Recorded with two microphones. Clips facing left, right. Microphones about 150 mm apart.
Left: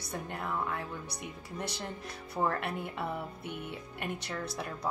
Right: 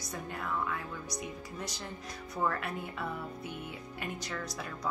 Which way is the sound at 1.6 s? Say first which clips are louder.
Left 5 dB; 65° left (ahead or behind).